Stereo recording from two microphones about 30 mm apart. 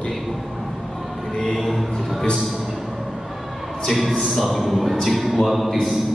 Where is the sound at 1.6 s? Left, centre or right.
Centre.